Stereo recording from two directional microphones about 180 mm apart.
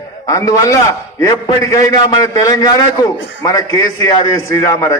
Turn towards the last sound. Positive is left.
turn(degrees=15)  # may be behind; listen again after turning